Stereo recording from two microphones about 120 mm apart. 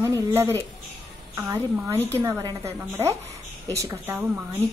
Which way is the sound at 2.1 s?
20° right (ahead or behind).